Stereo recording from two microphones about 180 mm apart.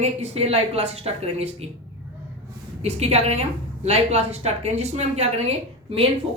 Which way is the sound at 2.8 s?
35° right (ahead or behind).